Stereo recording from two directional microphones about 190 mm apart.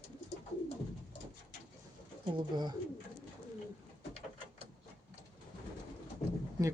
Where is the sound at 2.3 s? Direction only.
20° right (ahead or behind).